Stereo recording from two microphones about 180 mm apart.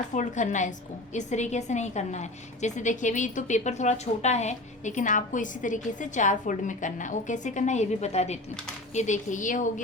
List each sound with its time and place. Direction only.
0.1 s a woman's voice: 40° left (ahead or behind)